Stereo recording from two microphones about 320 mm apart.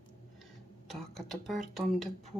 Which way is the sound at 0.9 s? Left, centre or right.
Centre.